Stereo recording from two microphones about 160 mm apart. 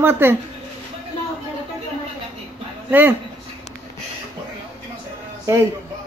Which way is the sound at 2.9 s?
10° right (ahead or behind).